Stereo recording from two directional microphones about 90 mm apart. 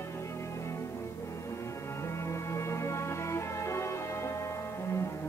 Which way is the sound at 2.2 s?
30° left (ahead or behind).